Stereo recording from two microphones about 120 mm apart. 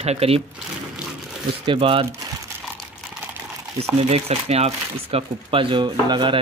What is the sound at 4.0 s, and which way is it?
Speech, 55° right (ahead or behind).